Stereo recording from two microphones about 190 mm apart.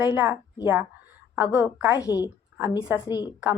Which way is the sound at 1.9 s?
20° left (ahead or behind).